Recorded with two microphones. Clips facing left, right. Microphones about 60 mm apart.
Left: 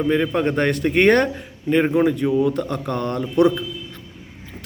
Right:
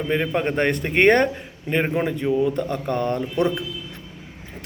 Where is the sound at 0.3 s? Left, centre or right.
Centre.